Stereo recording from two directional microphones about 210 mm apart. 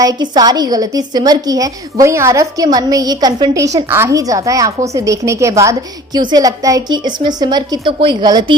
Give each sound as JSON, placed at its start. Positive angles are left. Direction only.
{"t": 0.0, "sound": "a woman's voice", "side_deg": -20}